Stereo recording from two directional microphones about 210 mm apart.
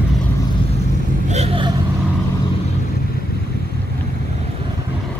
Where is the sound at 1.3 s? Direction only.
30° right (ahead or behind).